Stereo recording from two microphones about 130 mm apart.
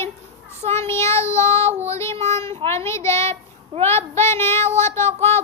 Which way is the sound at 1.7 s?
55° right (ahead or behind).